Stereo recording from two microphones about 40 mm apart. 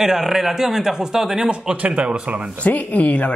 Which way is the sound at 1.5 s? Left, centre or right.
Right.